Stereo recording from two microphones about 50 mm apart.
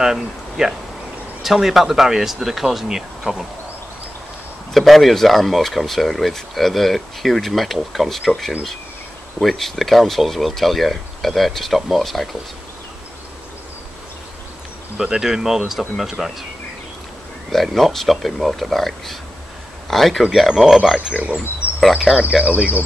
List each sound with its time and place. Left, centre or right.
0.0 s speech: centre
4.7 s speech: centre
15.0 s speech: centre
17.5 s speech: centre
21.1 s speech: right
21.9 s speech: centre
22.4 s speech: right